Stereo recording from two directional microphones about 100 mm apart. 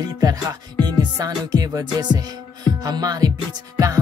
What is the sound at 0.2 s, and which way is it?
Music, 35° right (ahead or behind).